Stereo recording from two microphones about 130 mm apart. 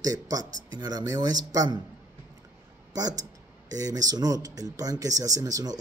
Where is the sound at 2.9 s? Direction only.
30° right (ahead or behind).